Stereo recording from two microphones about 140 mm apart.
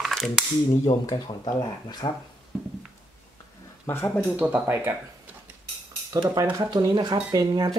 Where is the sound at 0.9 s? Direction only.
30° left (ahead or behind).